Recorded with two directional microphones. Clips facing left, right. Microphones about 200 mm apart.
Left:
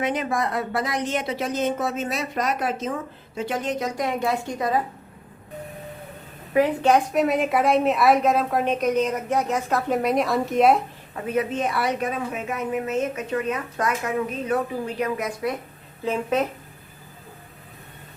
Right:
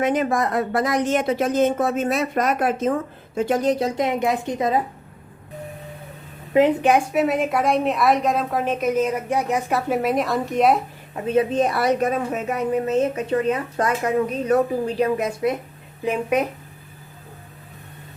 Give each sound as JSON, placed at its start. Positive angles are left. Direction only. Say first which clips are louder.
{"t": 0.0, "sound": "a woman's voice", "louder": "right 4 dB", "side_deg": -45}
{"t": 6.5, "sound": "a woman's voice", "louder": "right 2 dB", "side_deg": -20}
{"t": 7.1, "sound": "a woman's voice", "louder": "right 1 dB", "side_deg": 0}
{"t": 11.1, "sound": "a woman's voice", "louder": "right 5 dB", "side_deg": -30}
{"t": 16.0, "sound": "a woman's voice", "louder": "right 2 dB", "side_deg": -15}